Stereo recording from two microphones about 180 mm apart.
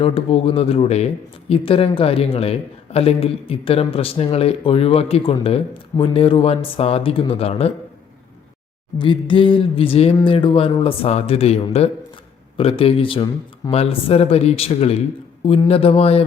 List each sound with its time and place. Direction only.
0.0 s speech: 30° left (ahead or behind)
9.0 s a sound: 25° left (ahead or behind)
10.2 s speech: 25° left (ahead or behind)